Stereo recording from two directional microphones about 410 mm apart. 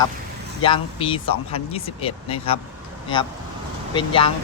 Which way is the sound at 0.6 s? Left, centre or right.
Centre.